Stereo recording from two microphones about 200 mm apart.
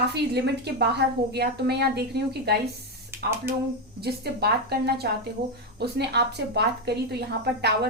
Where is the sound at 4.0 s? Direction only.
55° right (ahead or behind).